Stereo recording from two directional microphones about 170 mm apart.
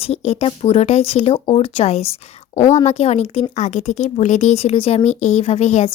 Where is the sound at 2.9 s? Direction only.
40° left (ahead or behind).